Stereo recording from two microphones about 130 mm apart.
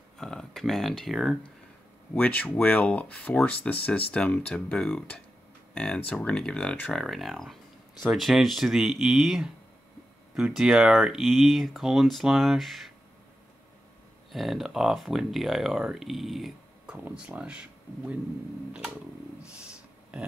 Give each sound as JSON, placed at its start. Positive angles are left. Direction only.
{"t": 0.2, "sound": "speech", "side_deg": 5}
{"t": 2.1, "sound": "speech", "side_deg": 10}
{"t": 14.3, "sound": "speech", "side_deg": 0}
{"t": 19.7, "sound": "a sound", "side_deg": -10}